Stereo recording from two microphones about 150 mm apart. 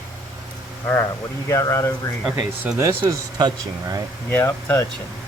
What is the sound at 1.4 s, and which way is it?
Speech, 20° left (ahead or behind).